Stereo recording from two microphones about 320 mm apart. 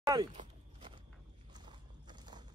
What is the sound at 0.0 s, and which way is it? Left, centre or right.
Speech, centre.